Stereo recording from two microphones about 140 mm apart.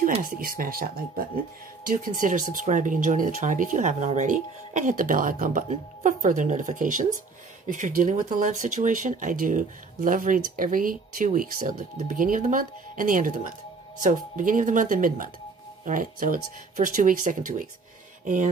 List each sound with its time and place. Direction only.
0.2 s speech: 85° right
1.9 s speech: 75° right (ahead or behind)